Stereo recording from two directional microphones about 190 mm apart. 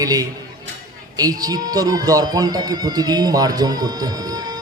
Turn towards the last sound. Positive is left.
turn(degrees=-20)  # may be behind; listen again after turning